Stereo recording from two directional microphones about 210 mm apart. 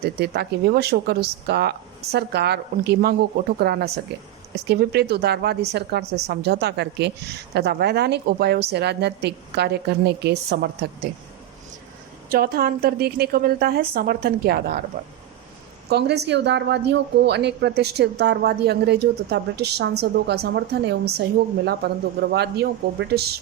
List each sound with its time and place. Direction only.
0.0 s a woman's voice: 50° right (ahead or behind)
12.3 s a woman's voice: 45° right (ahead or behind)
15.9 s a woman's voice: 50° right (ahead or behind)